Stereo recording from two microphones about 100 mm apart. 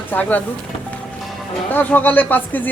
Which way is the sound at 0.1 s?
15° left (ahead or behind).